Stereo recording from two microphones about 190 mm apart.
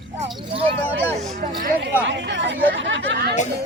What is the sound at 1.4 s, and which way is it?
Speech, 50° right (ahead or behind).